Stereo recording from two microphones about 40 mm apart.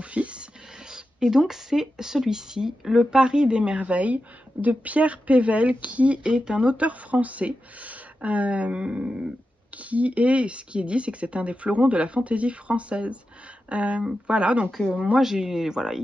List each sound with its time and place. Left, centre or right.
0.0 s a sound: right
0.9 s speech: centre
15.1 s speech: centre